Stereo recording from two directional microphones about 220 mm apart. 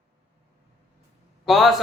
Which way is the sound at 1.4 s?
Centre (ahead or behind).